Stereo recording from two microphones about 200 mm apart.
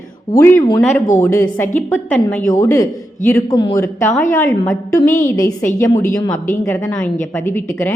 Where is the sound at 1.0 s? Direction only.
15° left (ahead or behind).